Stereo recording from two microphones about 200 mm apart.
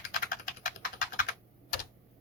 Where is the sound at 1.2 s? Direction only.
45° left (ahead or behind).